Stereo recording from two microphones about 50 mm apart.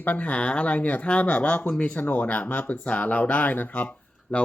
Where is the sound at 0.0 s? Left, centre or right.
Left.